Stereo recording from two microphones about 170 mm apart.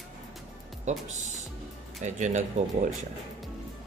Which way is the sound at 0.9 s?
45° right (ahead or behind).